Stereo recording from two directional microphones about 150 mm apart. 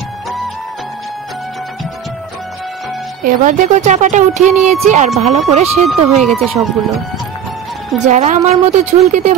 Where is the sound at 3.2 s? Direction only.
55° right (ahead or behind).